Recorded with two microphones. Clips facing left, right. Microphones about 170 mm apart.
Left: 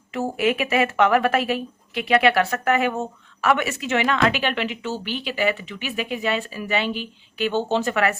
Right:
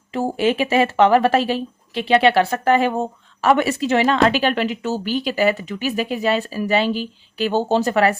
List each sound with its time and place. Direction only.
0.1 s a woman's voice: 30° right (ahead or behind)